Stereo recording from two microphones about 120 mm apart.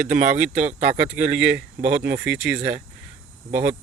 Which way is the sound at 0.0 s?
90° right.